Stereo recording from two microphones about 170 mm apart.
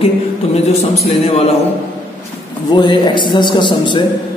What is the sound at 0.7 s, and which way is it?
Speech, 40° left (ahead or behind).